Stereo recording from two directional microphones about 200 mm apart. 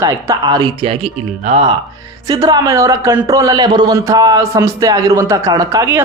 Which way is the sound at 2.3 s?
20° right (ahead or behind).